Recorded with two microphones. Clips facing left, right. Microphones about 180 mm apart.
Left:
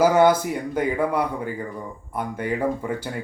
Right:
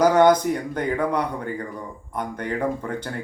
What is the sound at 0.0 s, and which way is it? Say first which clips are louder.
Speech: right 1 dB; 5° left (ahead or behind).